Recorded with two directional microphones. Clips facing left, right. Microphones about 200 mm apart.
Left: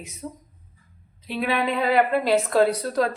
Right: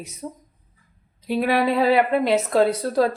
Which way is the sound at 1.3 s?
40° right (ahead or behind).